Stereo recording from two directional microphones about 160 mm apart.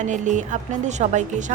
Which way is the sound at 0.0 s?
50° right (ahead or behind).